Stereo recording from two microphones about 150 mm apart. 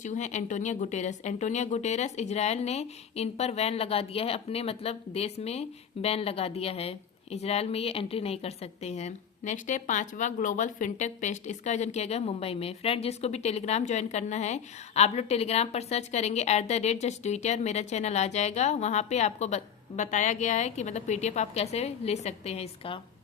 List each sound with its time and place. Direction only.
0.0 s speech: 55° left (ahead or behind)